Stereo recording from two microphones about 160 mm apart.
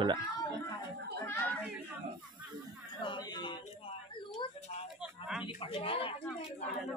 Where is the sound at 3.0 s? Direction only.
30° left (ahead or behind).